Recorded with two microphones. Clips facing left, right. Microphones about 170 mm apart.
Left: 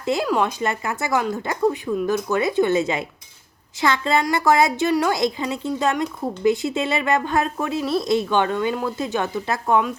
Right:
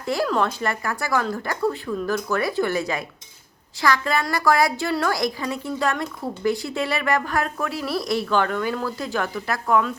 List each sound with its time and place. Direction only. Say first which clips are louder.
0.0 s a woman's voice: left 2 dB; 20° left (ahead or behind)